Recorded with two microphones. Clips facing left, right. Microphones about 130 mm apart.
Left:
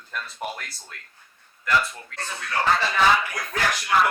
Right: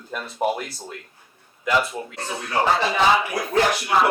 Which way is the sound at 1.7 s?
15° right (ahead or behind).